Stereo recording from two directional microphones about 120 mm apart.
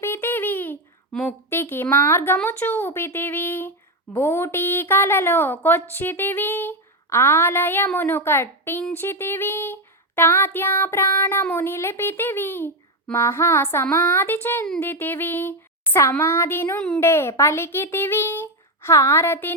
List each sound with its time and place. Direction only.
0.0 s a sound: 20° left (ahead or behind)
1.1 s speech: 5° left (ahead or behind)
1.5 s a woman's voice: 20° left (ahead or behind)